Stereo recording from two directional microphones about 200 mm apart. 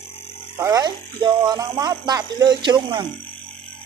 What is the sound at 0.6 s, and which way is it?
Speech, 20° right (ahead or behind).